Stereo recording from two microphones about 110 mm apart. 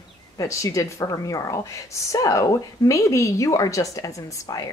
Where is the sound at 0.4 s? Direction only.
30° left (ahead or behind).